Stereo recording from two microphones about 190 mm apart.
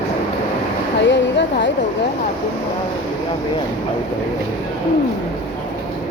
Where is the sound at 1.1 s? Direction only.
65° left (ahead or behind).